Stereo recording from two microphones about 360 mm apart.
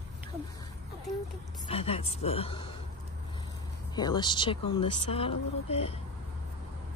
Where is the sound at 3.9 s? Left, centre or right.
Centre.